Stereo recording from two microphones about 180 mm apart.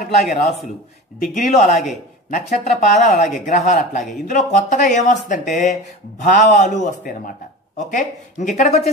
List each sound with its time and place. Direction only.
0.2 s speech: 40° left (ahead or behind)
1.5 s speech: 45° left (ahead or behind)